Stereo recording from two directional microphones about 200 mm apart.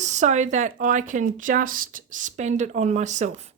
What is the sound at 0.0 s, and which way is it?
Speech, 35° right (ahead or behind).